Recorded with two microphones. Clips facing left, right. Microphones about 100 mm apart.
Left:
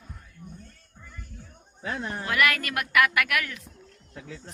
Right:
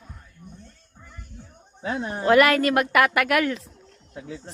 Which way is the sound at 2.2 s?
30° right (ahead or behind).